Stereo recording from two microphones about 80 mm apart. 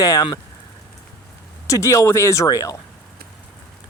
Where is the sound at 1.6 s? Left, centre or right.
Left.